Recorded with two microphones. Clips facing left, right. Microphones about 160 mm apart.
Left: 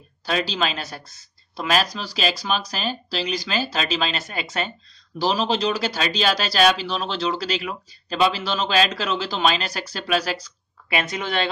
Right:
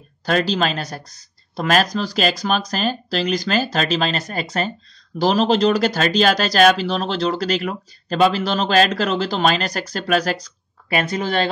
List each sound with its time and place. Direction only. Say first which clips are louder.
0.2 s speech: right 5 dB; 45° right (ahead or behind)